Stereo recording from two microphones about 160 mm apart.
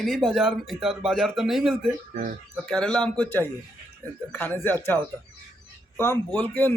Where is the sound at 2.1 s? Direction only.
55° right (ahead or behind).